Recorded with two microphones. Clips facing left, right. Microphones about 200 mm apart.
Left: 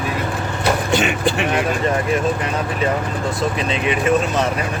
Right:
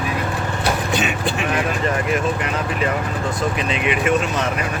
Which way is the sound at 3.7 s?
35° left (ahead or behind).